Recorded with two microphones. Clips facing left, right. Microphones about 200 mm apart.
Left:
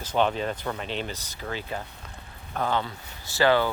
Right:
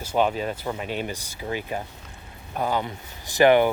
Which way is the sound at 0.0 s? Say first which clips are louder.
Right 2 dB; 10° right (ahead or behind).